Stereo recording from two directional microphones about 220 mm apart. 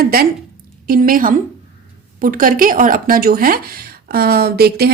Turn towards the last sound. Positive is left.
turn(degrees=-45)  # may be behind; listen again after turning